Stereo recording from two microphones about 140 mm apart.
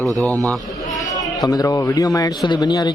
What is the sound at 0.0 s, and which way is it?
Speech, 10° left (ahead or behind).